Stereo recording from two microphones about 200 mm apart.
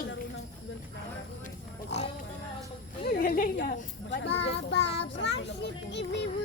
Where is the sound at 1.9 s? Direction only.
60° left (ahead or behind).